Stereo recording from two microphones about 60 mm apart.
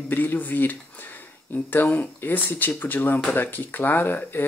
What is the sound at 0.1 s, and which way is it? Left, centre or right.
Speech, left.